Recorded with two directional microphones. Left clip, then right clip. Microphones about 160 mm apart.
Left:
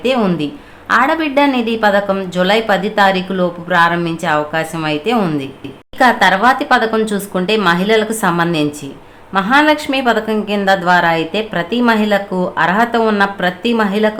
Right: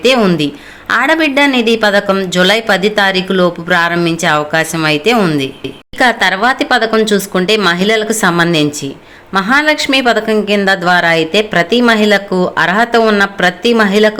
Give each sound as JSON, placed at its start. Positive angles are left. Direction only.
{"t": 0.0, "sound": "a woman's voice", "side_deg": -15}